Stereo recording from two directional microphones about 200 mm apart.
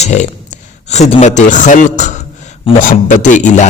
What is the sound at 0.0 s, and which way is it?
A man's voice, 35° left (ahead or behind).